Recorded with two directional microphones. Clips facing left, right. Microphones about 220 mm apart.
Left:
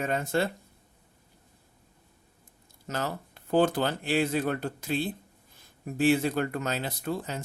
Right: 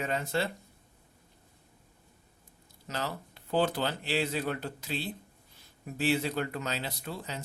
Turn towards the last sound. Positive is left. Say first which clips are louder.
# left 7 dB
turn(degrees=50)  # may be behind; listen again after turning